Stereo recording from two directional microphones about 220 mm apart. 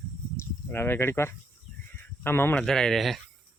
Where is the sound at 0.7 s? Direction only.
10° left (ahead or behind).